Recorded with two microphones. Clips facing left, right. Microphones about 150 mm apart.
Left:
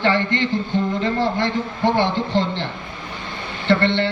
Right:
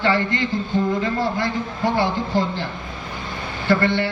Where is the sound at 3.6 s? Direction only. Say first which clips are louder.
Left 1 dB; 25° left (ahead or behind).